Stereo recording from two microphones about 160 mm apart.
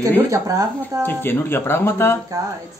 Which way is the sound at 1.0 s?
15° left (ahead or behind).